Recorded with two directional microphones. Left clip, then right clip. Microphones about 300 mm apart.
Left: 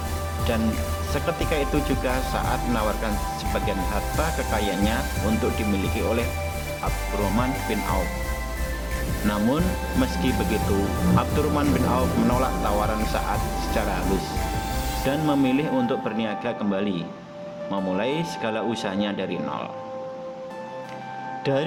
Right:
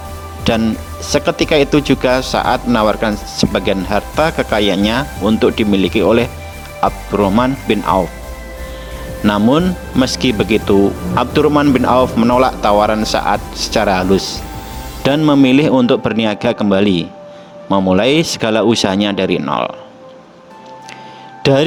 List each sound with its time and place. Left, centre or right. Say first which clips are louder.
0.5 s speech: right 11 dB; right
9.2 s speech: right 12 dB; right
15.0 s speech: right 12 dB; right
21.4 s speech: right 12 dB; right